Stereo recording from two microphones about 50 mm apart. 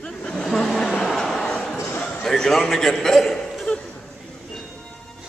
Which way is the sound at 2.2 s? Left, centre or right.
Centre.